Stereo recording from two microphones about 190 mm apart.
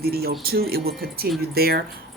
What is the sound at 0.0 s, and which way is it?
Speech, 55° right (ahead or behind).